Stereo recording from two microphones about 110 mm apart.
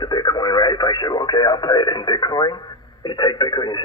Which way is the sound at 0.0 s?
40° left (ahead or behind).